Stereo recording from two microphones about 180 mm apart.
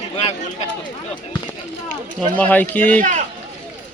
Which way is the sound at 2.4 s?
10° left (ahead or behind).